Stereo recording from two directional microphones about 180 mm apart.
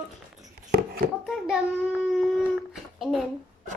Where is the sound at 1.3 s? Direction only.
5° right (ahead or behind).